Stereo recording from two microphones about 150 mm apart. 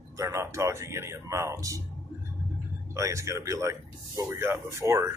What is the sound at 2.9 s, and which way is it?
Speech, 20° right (ahead or behind).